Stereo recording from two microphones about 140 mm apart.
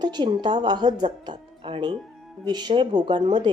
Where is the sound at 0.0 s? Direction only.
30° right (ahead or behind).